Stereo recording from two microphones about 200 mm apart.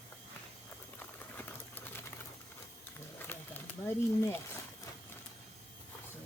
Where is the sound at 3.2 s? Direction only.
10° left (ahead or behind).